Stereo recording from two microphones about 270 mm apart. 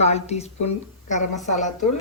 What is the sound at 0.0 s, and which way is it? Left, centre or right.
Speech, left.